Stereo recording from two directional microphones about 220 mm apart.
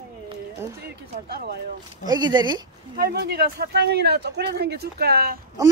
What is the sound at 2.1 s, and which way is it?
Speech, 20° right (ahead or behind).